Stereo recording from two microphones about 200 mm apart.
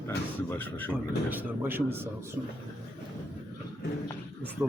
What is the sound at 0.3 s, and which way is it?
Speech, 10° left (ahead or behind).